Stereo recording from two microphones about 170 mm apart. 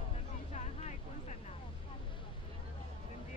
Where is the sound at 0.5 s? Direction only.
40° left (ahead or behind).